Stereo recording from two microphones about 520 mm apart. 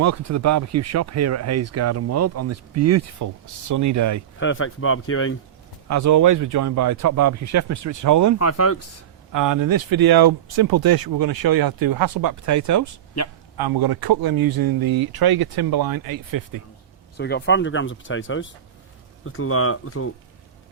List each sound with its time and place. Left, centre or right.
0.0 s speech: right
4.4 s speech: left
5.9 s speech: right
8.4 s speech: left
9.3 s speech: right
13.2 s a man's voice: left
13.6 s speech: right
17.2 s speech: centre